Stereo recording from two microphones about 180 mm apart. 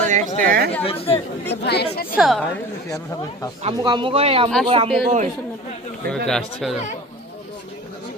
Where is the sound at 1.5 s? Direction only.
65° left (ahead or behind).